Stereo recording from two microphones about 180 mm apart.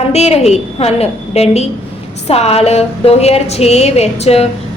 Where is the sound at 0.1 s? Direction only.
35° left (ahead or behind).